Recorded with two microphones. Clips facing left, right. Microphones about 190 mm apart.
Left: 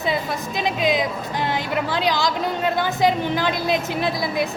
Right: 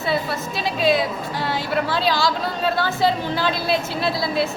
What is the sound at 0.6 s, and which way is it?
Speech, 15° left (ahead or behind).